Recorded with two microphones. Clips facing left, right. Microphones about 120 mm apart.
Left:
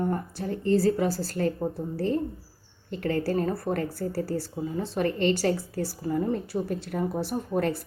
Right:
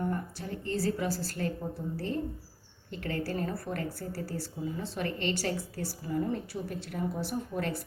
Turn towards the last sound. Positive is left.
turn(degrees=40)  # may be behind; listen again after turning